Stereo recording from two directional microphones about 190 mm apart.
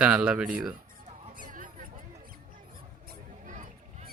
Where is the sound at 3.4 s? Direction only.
40° right (ahead or behind).